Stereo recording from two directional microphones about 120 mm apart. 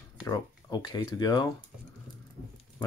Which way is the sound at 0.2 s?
35° left (ahead or behind).